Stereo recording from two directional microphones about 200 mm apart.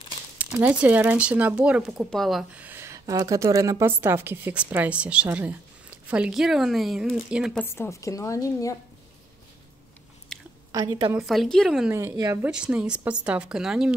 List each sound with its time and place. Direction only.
0.4 s speech: 5° right (ahead or behind)
7.6 s a woman's voice: 10° left (ahead or behind)
10.3 s chewing: centre (ahead or behind)
10.7 s speech: 20° right (ahead or behind)
11.1 s speech: centre (ahead or behind)
11.9 s speech: 15° right (ahead or behind)
12.4 s speech: 5° right (ahead or behind)